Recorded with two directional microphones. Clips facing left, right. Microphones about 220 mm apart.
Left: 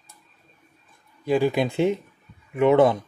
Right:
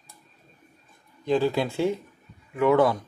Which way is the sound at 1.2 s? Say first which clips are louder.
Left 2 dB; 15° left (ahead or behind).